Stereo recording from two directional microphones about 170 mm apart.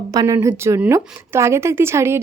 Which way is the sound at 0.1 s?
20° right (ahead or behind).